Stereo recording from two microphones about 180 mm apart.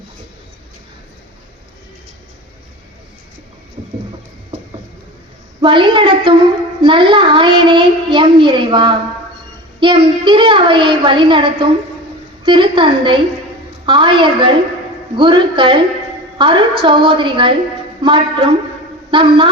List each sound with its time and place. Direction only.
5.6 s a child's voice: 30° right (ahead or behind)